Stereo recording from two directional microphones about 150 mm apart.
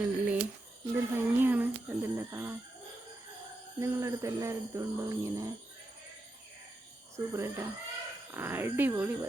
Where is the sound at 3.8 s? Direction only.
20° right (ahead or behind).